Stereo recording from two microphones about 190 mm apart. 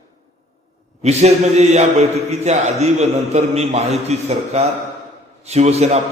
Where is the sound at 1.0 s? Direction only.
35° right (ahead or behind).